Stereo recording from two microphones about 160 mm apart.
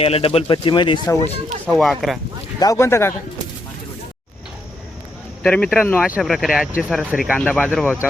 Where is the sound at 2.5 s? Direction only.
20° left (ahead or behind).